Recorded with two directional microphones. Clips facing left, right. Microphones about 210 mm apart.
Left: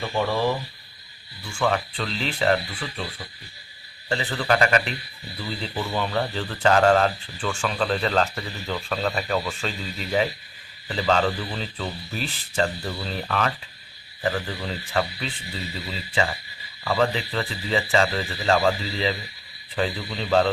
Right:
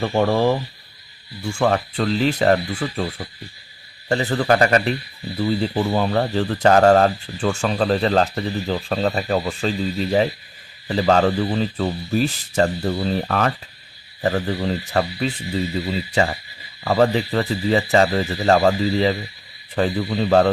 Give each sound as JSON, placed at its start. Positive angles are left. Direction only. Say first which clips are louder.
{"t": 0.0, "sound": "speech", "louder": "right 6 dB", "side_deg": -45}
{"t": 4.1, "sound": "a man's voice", "louder": "right 6 dB", "side_deg": -45}